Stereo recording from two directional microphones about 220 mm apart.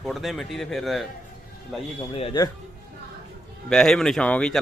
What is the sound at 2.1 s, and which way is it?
Speech, 25° left (ahead or behind).